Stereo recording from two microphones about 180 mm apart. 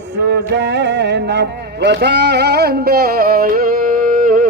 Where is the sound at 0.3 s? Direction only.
80° right.